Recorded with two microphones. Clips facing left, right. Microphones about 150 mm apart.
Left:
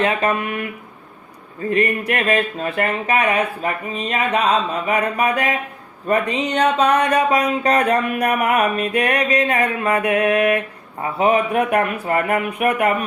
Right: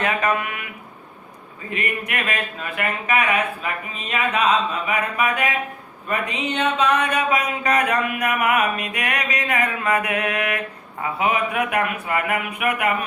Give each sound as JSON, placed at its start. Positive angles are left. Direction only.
{"t": 1.7, "sound": "speech", "side_deg": 35}